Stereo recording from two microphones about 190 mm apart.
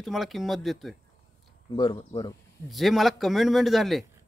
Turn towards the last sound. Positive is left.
turn(degrees=0)  # may be behind; listen again after turning